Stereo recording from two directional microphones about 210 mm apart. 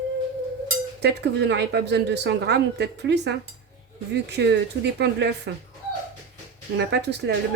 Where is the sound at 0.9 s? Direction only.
55° right (ahead or behind).